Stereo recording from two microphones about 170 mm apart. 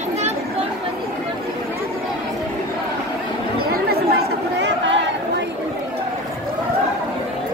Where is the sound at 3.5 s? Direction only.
65° right (ahead or behind); by 4.9 s 90° right.